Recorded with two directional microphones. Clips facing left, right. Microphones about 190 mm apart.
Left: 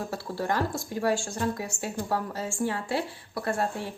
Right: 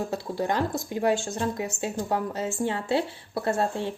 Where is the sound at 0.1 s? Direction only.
20° right (ahead or behind).